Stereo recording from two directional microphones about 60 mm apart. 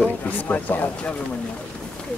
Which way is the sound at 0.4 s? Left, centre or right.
Left.